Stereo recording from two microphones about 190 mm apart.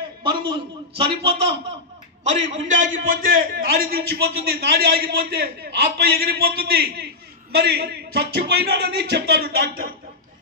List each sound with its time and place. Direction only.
0.2 s a man's voice: 25° right (ahead or behind)
2.2 s a man's voice: 40° right (ahead or behind); by 9.8 s 55° right (ahead or behind)